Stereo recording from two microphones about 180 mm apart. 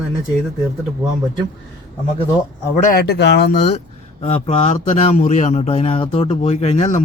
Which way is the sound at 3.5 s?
40° left (ahead or behind).